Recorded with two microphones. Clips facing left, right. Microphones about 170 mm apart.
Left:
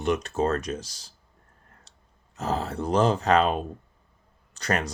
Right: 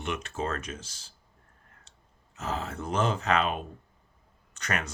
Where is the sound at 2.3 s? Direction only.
35° left (ahead or behind).